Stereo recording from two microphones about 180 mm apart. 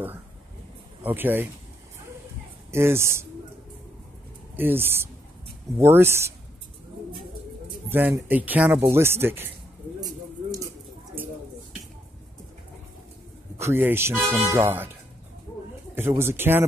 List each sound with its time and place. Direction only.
1.0 s speech: 10° right (ahead or behind)
2.7 s speech: 15° right (ahead or behind)
4.6 s speech: 10° right (ahead or behind)
7.9 s speech: 10° right (ahead or behind)
9.9 s a sound: 20° right (ahead or behind)
13.6 s speech: 15° right (ahead or behind)
16.2 s speech: 15° right (ahead or behind)